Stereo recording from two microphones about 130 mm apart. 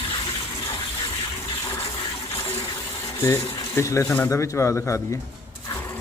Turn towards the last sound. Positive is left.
turn(degrees=20)  # may be behind; listen again after turning